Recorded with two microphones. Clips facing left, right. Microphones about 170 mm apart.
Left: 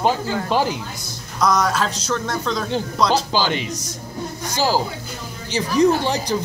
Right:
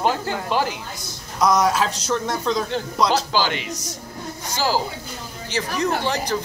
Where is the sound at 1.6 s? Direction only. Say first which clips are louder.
Right 1 dB; 5° right (ahead or behind).